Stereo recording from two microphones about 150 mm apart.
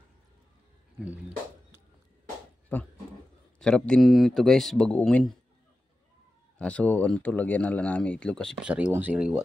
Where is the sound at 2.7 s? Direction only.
10° left (ahead or behind).